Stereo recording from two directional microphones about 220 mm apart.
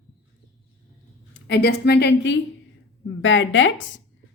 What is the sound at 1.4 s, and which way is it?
A woman's voice, 50° left (ahead or behind).